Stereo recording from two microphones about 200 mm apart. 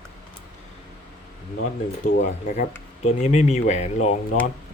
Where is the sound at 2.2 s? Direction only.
35° left (ahead or behind).